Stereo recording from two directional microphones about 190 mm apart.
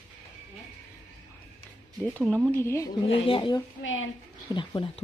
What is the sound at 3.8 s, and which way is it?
Speech, 90° left.